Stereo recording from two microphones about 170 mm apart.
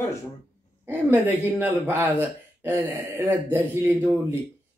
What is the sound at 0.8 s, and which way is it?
Speech, 10° right (ahead or behind).